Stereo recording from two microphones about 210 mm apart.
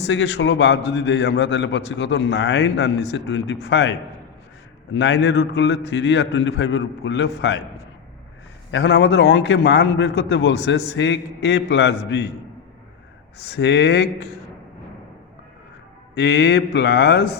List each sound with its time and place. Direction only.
0.0 s a man's voice: 55° left (ahead or behind)
8.7 s a man's voice: 60° left (ahead or behind)
13.5 s a man's voice: 55° left (ahead or behind)
16.1 s speech: 55° left (ahead or behind)